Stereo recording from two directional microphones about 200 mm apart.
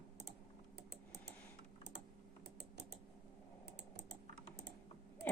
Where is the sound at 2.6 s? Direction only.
55° right (ahead or behind).